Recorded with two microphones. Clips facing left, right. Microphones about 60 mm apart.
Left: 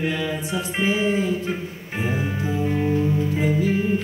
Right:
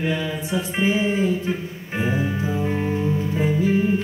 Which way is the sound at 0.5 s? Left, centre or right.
Centre.